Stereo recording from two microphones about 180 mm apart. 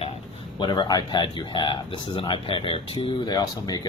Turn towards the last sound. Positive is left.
turn(degrees=20)  # may be behind; listen again after turning